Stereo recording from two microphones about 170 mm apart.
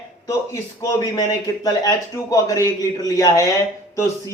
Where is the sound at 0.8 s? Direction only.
20° left (ahead or behind).